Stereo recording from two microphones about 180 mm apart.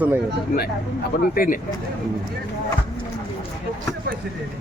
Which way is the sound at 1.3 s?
50° left (ahead or behind).